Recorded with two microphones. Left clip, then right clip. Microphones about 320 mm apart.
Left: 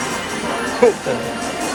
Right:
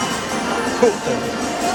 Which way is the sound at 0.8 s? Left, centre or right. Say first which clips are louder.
Left 3 dB; centre.